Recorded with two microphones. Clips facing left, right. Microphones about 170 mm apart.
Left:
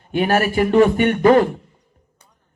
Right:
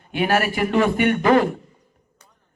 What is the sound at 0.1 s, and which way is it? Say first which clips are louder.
A man's voice: left 3 dB; 40° left (ahead or behind).